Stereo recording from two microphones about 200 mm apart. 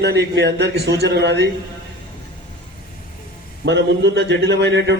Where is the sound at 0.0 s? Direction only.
55° right (ahead or behind).